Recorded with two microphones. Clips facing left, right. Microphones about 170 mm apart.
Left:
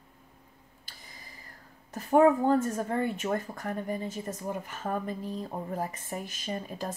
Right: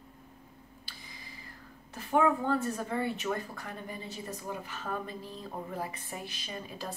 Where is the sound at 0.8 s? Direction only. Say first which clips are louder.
Even; 45° left (ahead or behind).